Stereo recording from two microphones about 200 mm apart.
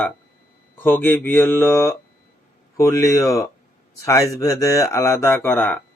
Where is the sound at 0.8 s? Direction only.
10° left (ahead or behind).